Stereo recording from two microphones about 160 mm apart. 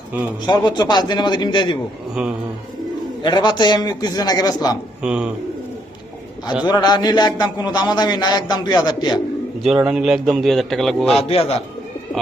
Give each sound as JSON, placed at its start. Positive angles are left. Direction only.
{"t": 0.4, "sound": "a man's voice", "side_deg": 25}
{"t": 3.2, "sound": "a man's voice", "side_deg": 25}
{"t": 5.0, "sound": "a man's voice", "side_deg": -5}
{"t": 6.7, "sound": "a man's voice", "side_deg": 25}
{"t": 9.6, "sound": "a man's voice", "side_deg": -5}
{"t": 11.2, "sound": "a man's voice", "side_deg": 35}